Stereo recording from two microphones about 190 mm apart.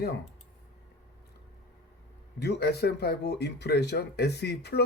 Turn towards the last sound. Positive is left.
turn(degrees=60)  # may be behind; listen again after turning